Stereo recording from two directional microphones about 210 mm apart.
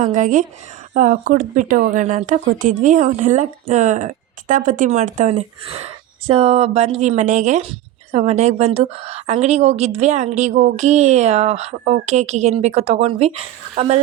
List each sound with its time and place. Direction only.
0.0 s speech: 35° right (ahead or behind)